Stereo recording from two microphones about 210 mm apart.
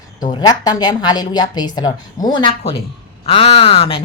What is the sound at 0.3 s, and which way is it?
A woman's voice, 20° left (ahead or behind).